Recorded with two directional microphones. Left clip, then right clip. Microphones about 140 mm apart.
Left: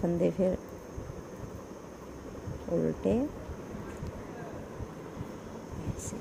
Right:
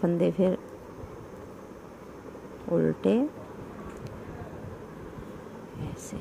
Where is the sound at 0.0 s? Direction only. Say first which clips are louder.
Right 3 dB; 30° right (ahead or behind).